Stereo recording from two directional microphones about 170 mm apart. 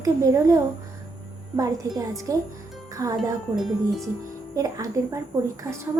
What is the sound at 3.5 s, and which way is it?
Speech, centre (ahead or behind).